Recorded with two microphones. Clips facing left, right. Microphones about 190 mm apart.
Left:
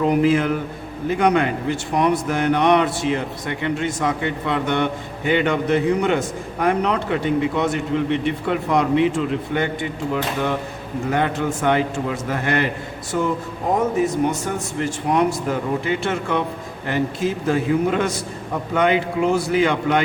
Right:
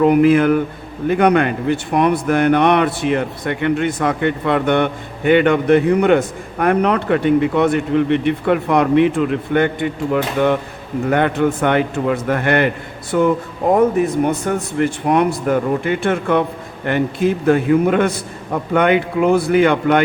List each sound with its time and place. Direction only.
0.0 s speech: 60° right (ahead or behind)